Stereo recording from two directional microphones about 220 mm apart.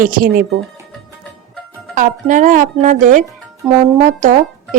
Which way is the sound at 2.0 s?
35° right (ahead or behind).